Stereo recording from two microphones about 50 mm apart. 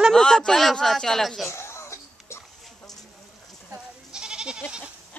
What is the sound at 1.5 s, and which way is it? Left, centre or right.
Music, left.